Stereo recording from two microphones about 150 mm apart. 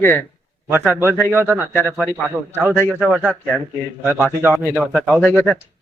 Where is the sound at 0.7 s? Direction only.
10° right (ahead or behind).